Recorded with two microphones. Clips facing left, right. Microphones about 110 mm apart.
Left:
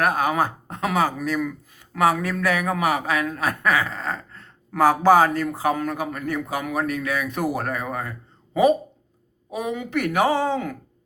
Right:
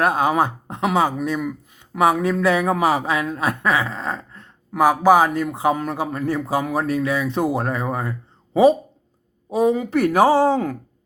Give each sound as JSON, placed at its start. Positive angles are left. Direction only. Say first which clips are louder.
{"t": 0.0, "sound": "speech", "louder": "right 3 dB", "side_deg": -25}
{"t": 9.5, "sound": "speech", "louder": "right 9 dB", "side_deg": -35}